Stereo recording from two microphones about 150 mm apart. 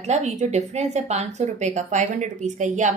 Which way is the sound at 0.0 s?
50° right (ahead or behind).